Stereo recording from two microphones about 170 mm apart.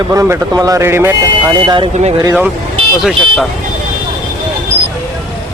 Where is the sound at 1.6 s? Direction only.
25° right (ahead or behind).